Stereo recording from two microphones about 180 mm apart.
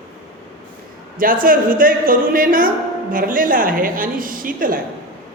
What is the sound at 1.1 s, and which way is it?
A woman's voice, 50° right (ahead or behind).